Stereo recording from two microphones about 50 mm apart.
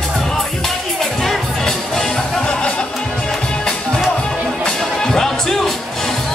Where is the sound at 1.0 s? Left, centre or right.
Centre.